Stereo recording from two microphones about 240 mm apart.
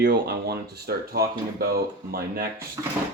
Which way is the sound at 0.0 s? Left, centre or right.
Right.